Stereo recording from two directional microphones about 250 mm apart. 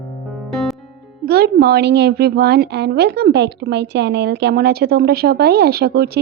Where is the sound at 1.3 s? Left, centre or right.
Right.